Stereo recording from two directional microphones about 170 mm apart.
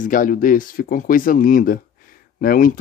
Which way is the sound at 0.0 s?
50° left (ahead or behind).